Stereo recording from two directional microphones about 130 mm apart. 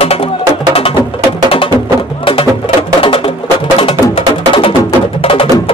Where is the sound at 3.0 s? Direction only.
45° left (ahead or behind).